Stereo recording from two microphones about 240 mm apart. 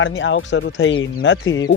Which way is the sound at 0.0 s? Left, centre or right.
Left.